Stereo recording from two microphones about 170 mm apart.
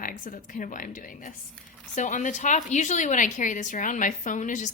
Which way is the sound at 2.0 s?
45° left (ahead or behind).